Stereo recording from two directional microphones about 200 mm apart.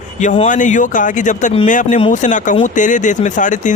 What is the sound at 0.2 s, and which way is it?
Speech, 35° left (ahead or behind).